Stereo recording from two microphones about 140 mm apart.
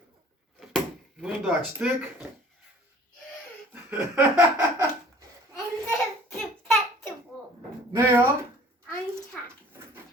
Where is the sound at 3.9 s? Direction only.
15° right (ahead or behind).